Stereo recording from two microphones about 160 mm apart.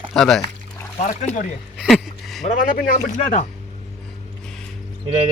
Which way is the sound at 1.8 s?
Centre (ahead or behind).